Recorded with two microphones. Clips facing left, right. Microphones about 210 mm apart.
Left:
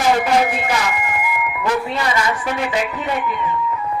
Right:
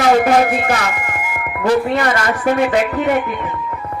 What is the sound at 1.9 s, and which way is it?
A man's voice, 55° right (ahead or behind).